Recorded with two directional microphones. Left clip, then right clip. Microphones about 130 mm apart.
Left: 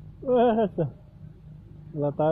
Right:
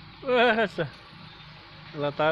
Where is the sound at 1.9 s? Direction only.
30° right (ahead or behind).